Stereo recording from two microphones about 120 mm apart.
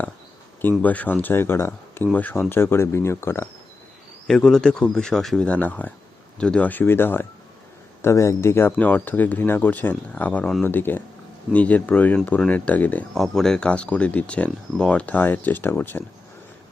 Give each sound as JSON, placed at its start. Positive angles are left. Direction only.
{"t": 0.8, "sound": "speech", "side_deg": 15}
{"t": 4.3, "sound": "speech", "side_deg": 5}
{"t": 13.1, "sound": "speech", "side_deg": 5}